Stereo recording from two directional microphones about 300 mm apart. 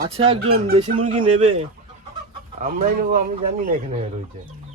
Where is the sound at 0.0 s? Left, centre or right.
Centre.